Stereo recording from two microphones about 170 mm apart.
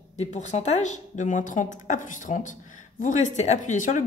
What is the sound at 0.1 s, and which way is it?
Speech, 40° left (ahead or behind).